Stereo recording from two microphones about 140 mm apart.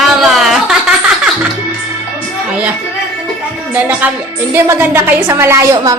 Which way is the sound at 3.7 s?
10° right (ahead or behind).